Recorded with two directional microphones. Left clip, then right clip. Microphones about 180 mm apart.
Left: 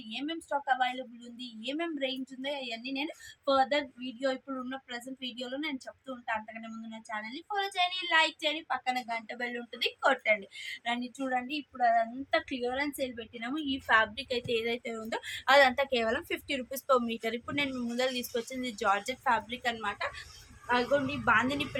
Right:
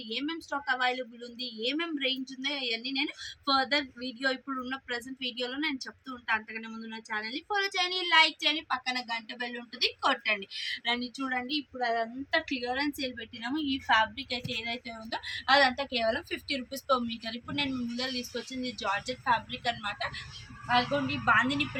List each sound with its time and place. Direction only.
0.1 s a woman's voice: 20° left (ahead or behind); by 20.1 s 45° left (ahead or behind)
20.7 s a woman's voice: 30° left (ahead or behind)